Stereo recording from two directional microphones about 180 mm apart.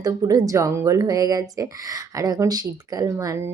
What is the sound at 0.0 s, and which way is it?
Speech, 20° right (ahead or behind).